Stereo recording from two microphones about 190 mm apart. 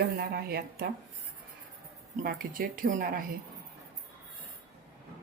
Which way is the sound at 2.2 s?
45° right (ahead or behind).